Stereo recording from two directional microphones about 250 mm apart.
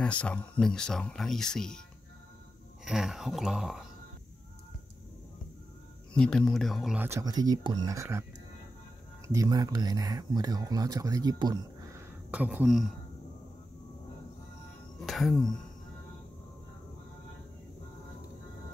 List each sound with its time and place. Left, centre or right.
0.0 s speech: centre
2.8 s speech: centre
6.1 s speech: centre
9.3 s speech: centre
15.0 s speech: centre